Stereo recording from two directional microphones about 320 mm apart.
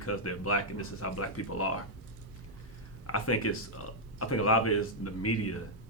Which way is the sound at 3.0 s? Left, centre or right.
Left.